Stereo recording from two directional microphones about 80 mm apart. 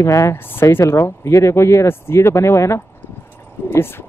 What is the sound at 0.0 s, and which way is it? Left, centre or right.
Speech, left.